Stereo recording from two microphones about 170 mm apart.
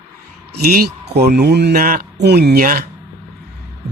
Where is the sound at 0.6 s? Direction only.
65° right (ahead or behind).